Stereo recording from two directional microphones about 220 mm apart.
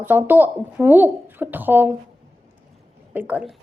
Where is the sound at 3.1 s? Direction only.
10° right (ahead or behind).